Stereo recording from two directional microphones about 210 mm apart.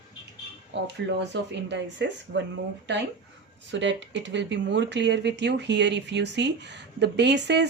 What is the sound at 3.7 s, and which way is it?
Speech, 60° right (ahead or behind).